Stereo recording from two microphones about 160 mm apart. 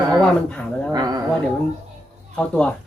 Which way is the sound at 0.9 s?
25° right (ahead or behind).